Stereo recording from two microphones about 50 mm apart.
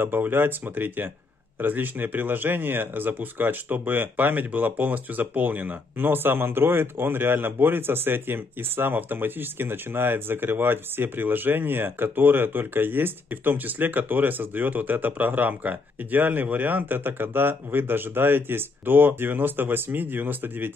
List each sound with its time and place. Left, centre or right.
0.0 s speech: right